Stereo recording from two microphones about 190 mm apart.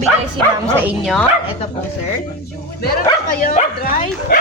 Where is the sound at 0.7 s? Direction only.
10° right (ahead or behind).